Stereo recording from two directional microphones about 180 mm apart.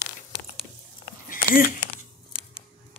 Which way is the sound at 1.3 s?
50° left (ahead or behind).